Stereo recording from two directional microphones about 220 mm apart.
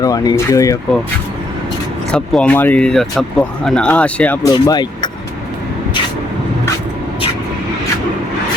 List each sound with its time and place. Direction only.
0.0 s speech: 15° left (ahead or behind)
2.1 s speech: 5° left (ahead or behind)
4.5 s speech: 20° left (ahead or behind)